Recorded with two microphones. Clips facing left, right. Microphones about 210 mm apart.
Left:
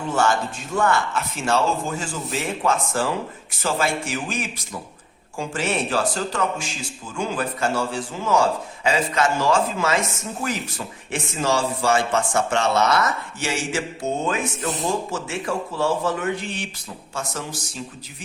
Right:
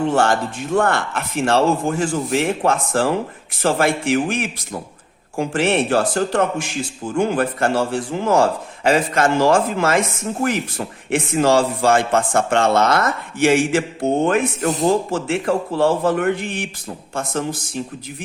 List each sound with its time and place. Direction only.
0.0 s a man's voice: 55° right (ahead or behind)